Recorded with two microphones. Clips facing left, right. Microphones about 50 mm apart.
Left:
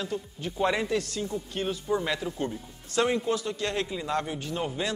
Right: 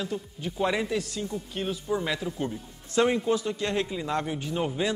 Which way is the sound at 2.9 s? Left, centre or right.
Centre.